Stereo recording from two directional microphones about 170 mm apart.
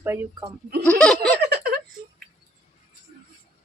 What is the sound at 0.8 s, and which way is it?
Goat, 5° left (ahead or behind).